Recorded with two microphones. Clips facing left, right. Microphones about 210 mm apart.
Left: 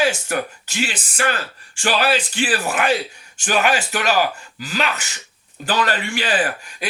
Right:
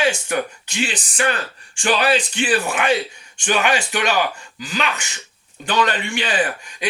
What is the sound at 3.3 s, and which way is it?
Speech, 40° left (ahead or behind).